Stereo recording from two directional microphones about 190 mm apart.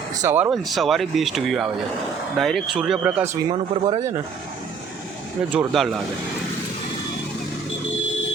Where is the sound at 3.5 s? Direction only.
30° right (ahead or behind).